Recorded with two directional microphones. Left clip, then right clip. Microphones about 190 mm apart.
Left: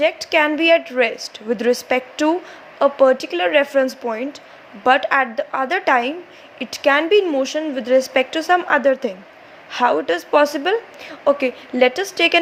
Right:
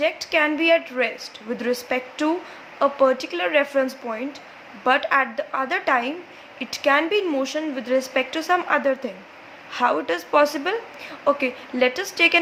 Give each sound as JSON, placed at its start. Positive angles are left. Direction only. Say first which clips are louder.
{"t": 0.0, "sound": "a woman's voice", "louder": "left 4 dB", "side_deg": 30}